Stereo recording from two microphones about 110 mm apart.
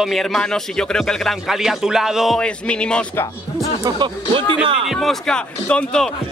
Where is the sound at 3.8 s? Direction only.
45° right (ahead or behind).